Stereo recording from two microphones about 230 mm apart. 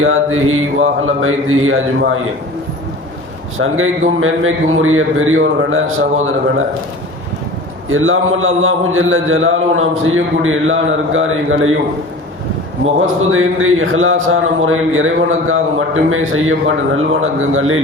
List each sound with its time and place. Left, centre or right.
0.0 s a man's voice: right
3.6 s a man's voice: right
7.9 s a man's voice: right
12.8 s a man's voice: right